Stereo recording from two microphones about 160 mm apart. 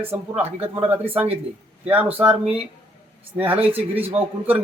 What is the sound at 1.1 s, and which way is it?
Speech, 10° right (ahead or behind).